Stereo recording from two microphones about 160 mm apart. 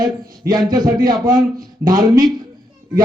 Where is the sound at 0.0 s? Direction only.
25° right (ahead or behind).